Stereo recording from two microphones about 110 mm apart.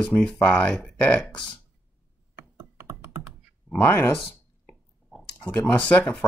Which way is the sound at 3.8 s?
20° left (ahead or behind).